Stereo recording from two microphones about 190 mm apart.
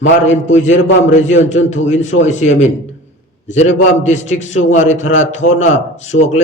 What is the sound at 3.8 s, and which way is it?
A man's voice, 40° left (ahead or behind).